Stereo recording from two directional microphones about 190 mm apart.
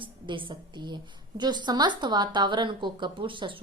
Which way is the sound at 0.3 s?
25° right (ahead or behind).